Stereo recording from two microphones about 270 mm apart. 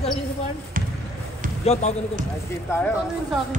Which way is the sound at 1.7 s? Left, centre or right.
Left.